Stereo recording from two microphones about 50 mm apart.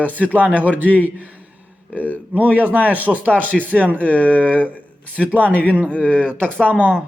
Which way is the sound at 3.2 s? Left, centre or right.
Left.